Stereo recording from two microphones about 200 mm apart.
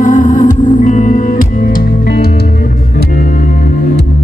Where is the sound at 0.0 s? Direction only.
40° left (ahead or behind).